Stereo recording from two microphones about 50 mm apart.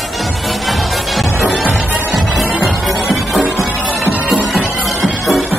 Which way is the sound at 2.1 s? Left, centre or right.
Centre.